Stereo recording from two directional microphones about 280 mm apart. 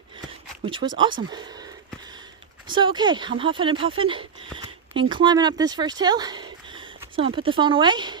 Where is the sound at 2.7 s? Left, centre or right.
Centre.